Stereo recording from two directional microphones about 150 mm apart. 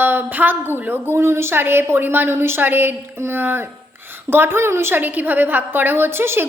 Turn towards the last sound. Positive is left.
turn(degrees=-15)  # may be behind; listen again after turning